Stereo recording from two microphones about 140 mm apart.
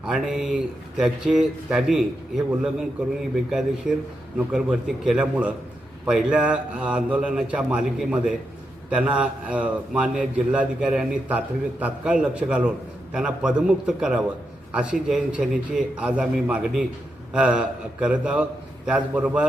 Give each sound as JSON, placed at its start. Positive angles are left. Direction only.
{"t": 0.1, "sound": "a man's voice", "side_deg": -5}